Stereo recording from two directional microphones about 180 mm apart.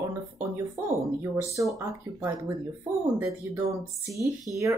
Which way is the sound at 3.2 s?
15° right (ahead or behind).